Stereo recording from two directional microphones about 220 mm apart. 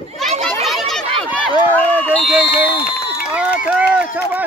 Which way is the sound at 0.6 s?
Centre (ahead or behind).